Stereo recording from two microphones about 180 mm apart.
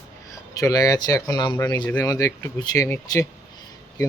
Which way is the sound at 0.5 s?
20° left (ahead or behind).